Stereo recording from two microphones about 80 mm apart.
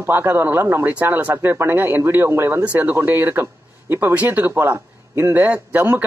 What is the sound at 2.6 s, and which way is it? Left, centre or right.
Speech, centre.